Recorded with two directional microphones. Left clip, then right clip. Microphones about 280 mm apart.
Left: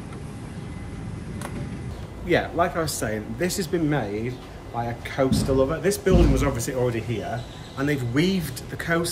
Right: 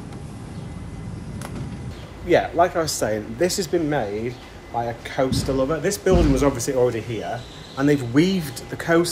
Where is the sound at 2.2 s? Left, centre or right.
Centre.